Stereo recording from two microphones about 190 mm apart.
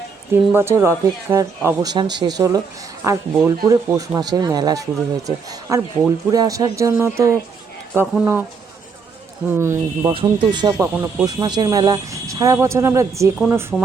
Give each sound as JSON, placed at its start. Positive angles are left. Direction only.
{"t": 0.5, "sound": "speech", "side_deg": -15}
{"t": 9.6, "sound": "speech", "side_deg": -15}
{"t": 10.1, "sound": "speech", "side_deg": -25}